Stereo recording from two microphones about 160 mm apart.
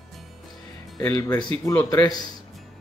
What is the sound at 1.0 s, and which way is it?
Speech, 25° left (ahead or behind).